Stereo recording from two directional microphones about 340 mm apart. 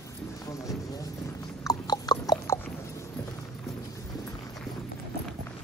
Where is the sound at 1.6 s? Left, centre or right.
Centre.